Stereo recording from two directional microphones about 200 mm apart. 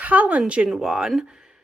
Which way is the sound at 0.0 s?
5° right (ahead or behind).